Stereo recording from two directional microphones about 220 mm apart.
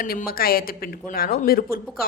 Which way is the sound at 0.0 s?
40° left (ahead or behind).